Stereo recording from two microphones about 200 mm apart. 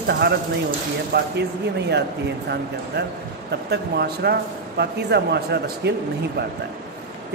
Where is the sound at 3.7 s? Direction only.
55° right (ahead or behind).